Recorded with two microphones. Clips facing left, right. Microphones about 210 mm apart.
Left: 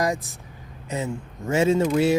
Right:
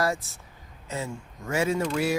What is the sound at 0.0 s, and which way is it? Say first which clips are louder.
Speech: left 3 dB; 15° left (ahead or behind).